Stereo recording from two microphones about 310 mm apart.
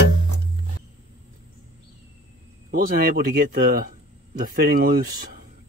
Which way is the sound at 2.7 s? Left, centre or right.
Right.